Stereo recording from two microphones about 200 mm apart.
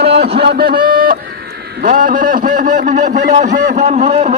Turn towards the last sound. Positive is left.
turn(degrees=-35)  # may be behind; listen again after turning